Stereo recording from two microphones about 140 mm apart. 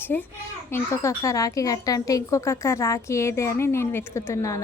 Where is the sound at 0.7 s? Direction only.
20° left (ahead or behind).